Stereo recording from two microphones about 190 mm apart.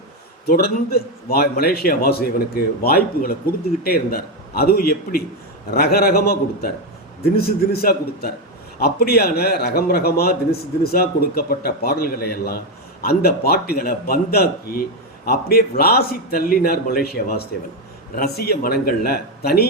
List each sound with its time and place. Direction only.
0.4 s a man's voice: 55° left (ahead or behind)